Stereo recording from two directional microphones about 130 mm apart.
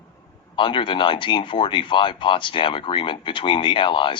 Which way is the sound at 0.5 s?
40° left (ahead or behind).